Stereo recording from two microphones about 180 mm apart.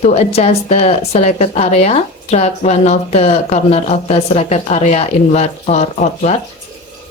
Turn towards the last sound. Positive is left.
turn(degrees=40)  # may be behind; listen again after turning